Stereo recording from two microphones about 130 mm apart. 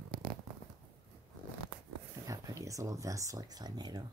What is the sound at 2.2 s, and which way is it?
Speech, 25° right (ahead or behind).